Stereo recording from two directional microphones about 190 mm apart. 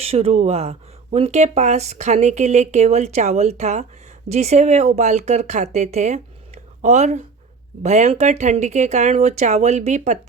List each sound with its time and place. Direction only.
0.0 s speech: 30° right (ahead or behind)